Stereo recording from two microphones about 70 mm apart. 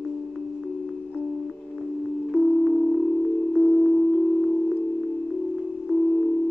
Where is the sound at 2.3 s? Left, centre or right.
Right.